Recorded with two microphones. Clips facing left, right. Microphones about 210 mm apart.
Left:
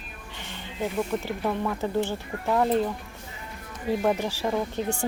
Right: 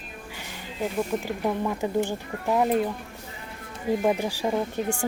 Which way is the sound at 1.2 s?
15° right (ahead or behind).